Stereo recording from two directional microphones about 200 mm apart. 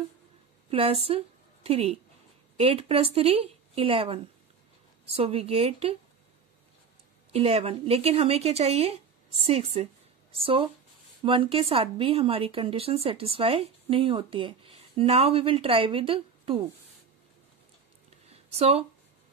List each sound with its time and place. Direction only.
0.7 s a woman's voice: 30° right (ahead or behind)
7.3 s a woman's voice: 30° right (ahead or behind)
18.3 s a sound: 30° right (ahead or behind)